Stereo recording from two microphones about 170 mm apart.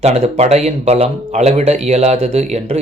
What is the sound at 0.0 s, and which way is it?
Speech, 40° right (ahead or behind).